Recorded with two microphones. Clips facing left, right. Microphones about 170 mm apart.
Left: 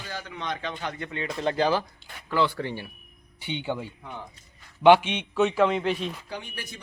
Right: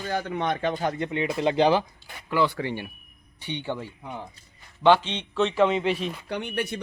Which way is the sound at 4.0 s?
25° right (ahead or behind).